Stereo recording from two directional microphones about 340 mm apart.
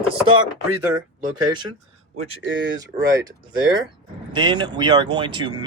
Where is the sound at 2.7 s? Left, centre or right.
Centre.